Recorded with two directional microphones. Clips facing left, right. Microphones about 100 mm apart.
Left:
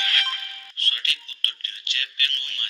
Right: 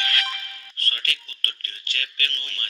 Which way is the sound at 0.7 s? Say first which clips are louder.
Right 1 dB; 45° right (ahead or behind).